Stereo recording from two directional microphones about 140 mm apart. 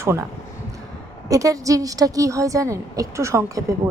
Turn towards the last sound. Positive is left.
turn(degrees=-20)  # may be behind; listen again after turning